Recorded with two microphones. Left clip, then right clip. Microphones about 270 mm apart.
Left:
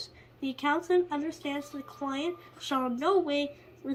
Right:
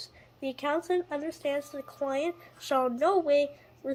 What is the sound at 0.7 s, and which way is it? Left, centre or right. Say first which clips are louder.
A woman's voice: left 3 dB; right.